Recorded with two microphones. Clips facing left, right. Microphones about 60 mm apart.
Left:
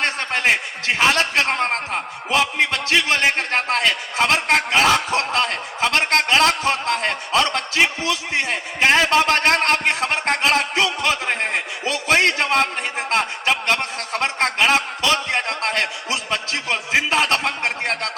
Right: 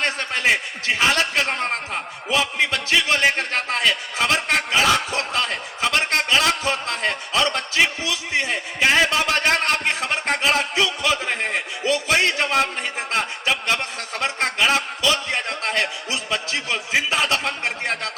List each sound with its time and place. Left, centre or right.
0.0 s a man's voice: left